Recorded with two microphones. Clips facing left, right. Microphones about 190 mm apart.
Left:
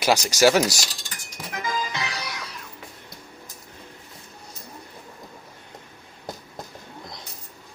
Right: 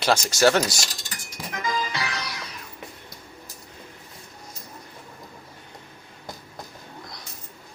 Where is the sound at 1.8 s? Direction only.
20° left (ahead or behind).